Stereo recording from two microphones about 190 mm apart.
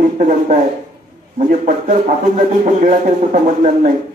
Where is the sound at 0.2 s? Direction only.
45° right (ahead or behind).